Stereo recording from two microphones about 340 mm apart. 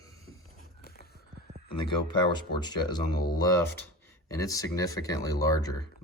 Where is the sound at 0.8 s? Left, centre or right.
Left.